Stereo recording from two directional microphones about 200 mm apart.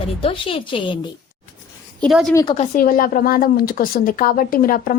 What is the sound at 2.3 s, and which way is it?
Speech, 15° left (ahead or behind).